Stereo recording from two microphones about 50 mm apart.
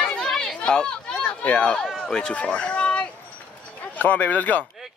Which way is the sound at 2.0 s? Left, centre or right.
Centre.